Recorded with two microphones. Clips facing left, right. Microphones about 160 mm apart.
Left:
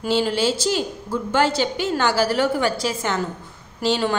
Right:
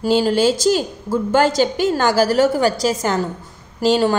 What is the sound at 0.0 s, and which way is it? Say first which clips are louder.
A woman's voice: right 5 dB; 40° right (ahead or behind).